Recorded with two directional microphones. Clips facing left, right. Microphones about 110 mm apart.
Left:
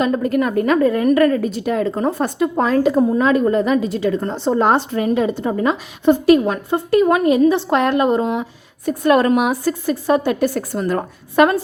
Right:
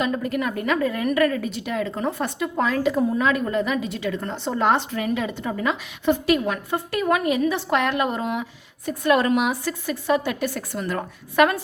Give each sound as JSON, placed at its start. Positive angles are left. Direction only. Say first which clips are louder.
{"t": 0.0, "sound": "a woman's voice", "louder": "left 7 dB", "side_deg": 40}
{"t": 8.9, "sound": "a woman's voice", "louder": "left 5 dB", "side_deg": 45}